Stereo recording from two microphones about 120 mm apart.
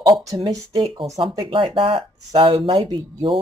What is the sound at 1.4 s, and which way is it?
Speech, 45° right (ahead or behind).